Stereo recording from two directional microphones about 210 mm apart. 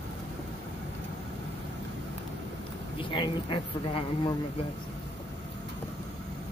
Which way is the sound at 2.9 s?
25° left (ahead or behind).